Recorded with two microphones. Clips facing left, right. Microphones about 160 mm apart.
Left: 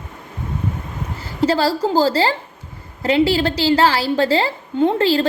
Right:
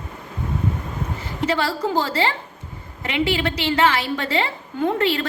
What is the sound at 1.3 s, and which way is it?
A woman's voice, 35° left (ahead or behind).